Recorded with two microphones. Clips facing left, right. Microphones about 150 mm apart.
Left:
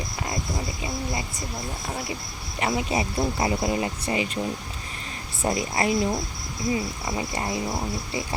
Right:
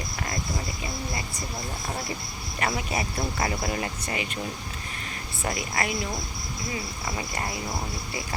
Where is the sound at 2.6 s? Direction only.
20° left (ahead or behind).